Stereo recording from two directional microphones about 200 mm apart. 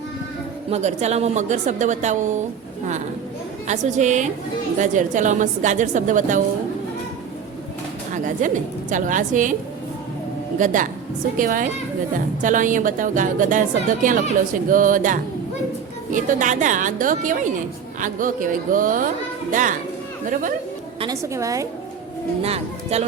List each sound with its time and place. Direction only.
0.7 s a woman's voice: 35° right (ahead or behind)
3.7 s a woman's voice: 35° right (ahead or behind)
8.1 s a woman's voice: 40° right (ahead or behind)
10.6 s a woman's voice: 40° right (ahead or behind)
21.0 s a woman's voice: 15° right (ahead or behind)
22.4 s a woman's voice: 30° right (ahead or behind)